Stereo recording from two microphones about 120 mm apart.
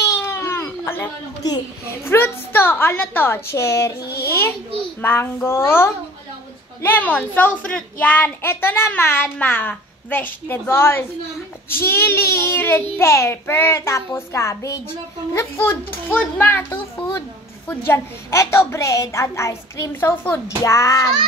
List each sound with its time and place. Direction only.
0.0 s baby cry: 20° left (ahead or behind)
2.0 s a woman's voice: 20° left (ahead or behind)
5.0 s a woman's voice: 20° left (ahead or behind)